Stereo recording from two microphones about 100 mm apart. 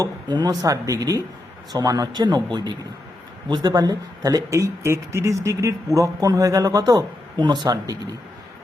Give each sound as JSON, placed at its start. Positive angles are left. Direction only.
{"t": 0.0, "sound": "speech", "side_deg": -40}